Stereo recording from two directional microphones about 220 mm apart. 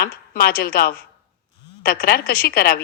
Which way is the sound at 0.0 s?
40° left (ahead or behind).